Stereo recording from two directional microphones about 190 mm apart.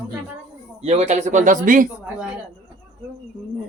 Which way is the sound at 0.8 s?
35° right (ahead or behind).